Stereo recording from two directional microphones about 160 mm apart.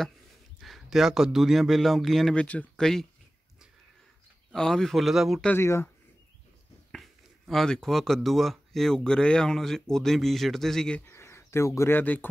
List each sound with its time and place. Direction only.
0.6 s speech: centre (ahead or behind)
4.5 s speech: 5° left (ahead or behind)
5.5 s speech: 15° left (ahead or behind)
6.9 s speech: centre (ahead or behind)
11.1 s speech: 15° left (ahead or behind)